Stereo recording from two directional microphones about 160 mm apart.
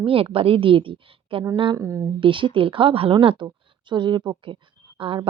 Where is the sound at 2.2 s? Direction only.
30° right (ahead or behind).